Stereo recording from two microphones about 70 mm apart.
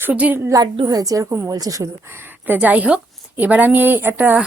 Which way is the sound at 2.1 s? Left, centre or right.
Right.